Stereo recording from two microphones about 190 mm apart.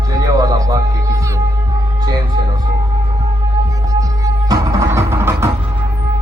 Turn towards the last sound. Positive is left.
turn(degrees=-15)  # may be behind; listen again after turning